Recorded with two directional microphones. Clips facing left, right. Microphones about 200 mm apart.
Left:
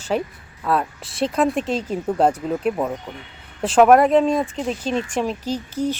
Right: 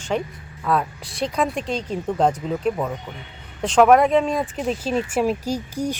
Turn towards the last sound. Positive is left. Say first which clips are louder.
# left 1 dB
turn(degrees=-10)  # may be behind; listen again after turning